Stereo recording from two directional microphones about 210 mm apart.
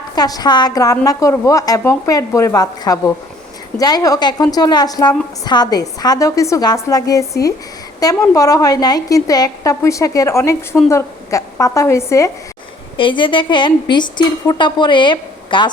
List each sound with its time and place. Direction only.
0.2 s a woman's voice: 20° left (ahead or behind)